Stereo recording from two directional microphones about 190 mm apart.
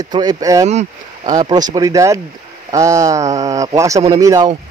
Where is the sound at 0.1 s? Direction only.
20° right (ahead or behind).